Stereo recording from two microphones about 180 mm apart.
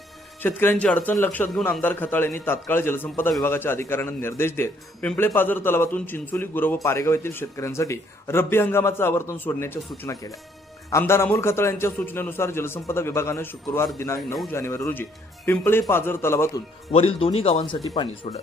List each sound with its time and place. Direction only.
0.4 s speech: 10° left (ahead or behind)
16.9 s speech: 30° left (ahead or behind)